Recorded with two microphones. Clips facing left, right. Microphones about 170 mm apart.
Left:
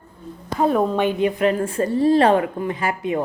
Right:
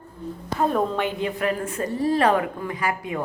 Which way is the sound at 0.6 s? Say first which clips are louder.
Left 4 dB; 15° left (ahead or behind).